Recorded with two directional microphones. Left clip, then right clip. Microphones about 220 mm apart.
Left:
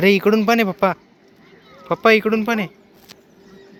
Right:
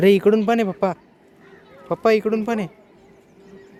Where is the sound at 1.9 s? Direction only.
5° right (ahead or behind).